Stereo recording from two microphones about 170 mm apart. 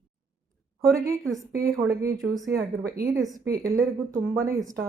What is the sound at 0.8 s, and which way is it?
A woman's voice, 15° right (ahead or behind).